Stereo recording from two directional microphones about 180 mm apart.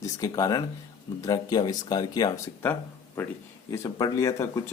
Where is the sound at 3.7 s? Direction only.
20° left (ahead or behind).